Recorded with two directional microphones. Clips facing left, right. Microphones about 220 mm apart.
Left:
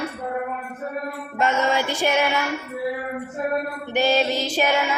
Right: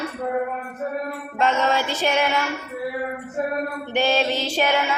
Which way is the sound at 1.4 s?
10° left (ahead or behind).